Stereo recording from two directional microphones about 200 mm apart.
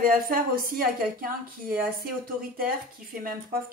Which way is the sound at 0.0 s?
45° right (ahead or behind).